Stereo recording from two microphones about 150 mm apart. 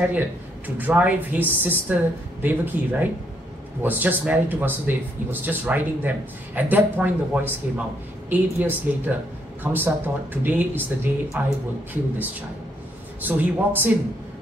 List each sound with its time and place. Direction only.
0.7 s speech: 10° right (ahead or behind)